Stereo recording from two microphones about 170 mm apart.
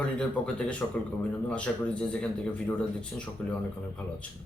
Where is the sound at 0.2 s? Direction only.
5° left (ahead or behind).